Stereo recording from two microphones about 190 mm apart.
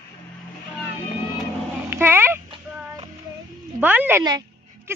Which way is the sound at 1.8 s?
10° right (ahead or behind).